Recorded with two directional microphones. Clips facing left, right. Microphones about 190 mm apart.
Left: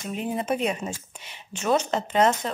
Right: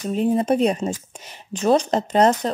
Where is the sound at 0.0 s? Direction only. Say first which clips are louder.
Right 9 dB; 35° right (ahead or behind).